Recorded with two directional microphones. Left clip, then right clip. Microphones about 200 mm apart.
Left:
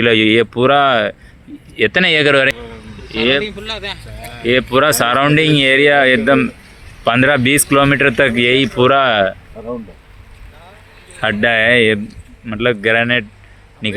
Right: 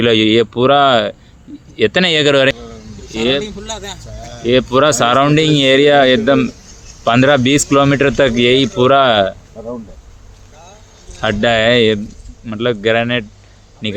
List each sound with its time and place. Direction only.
0.0 s speech: 5° right (ahead or behind)
3.4 s speech: 65° right (ahead or behind)
4.4 s speech: 10° right (ahead or behind)
11.2 s speech: 5° right (ahead or behind)